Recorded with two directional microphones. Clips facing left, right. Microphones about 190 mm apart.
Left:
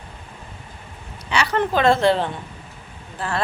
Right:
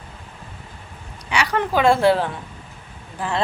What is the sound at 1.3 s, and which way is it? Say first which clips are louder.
Speech: left 1 dB; 15° right (ahead or behind).